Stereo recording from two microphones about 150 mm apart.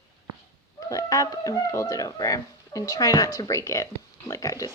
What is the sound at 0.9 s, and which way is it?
Speech, 20° left (ahead or behind).